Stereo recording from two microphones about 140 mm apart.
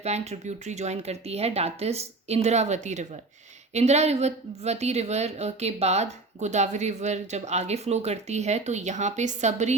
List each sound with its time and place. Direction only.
0.0 s a woman's voice: 50° right (ahead or behind)